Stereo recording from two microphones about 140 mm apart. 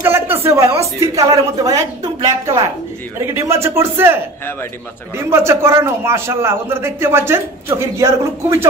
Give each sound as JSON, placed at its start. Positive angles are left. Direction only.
{"t": 0.0, "sound": "speech", "side_deg": -15}
{"t": 5.3, "sound": "a man's voice", "side_deg": -20}